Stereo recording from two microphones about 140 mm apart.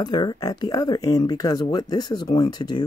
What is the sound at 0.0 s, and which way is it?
Speech, 30° left (ahead or behind).